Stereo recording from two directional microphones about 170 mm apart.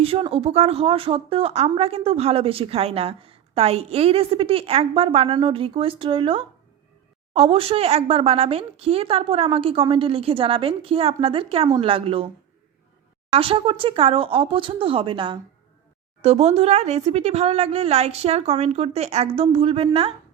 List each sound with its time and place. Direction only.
0.0 s speech: 35° right (ahead or behind)
13.3 s speech: 30° right (ahead or behind)